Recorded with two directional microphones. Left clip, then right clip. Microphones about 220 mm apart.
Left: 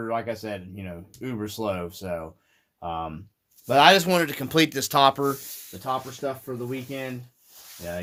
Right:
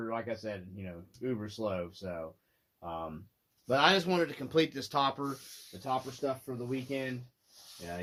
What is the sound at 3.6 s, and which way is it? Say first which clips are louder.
Speech: left 10 dB; 50° left (ahead or behind).